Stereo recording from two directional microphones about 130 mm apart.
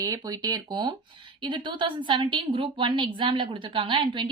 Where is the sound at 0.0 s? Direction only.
30° right (ahead or behind).